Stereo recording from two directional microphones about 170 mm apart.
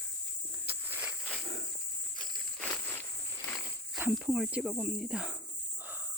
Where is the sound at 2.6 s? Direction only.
10° left (ahead or behind).